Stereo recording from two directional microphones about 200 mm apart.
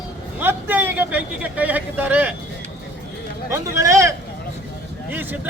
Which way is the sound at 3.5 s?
15° right (ahead or behind).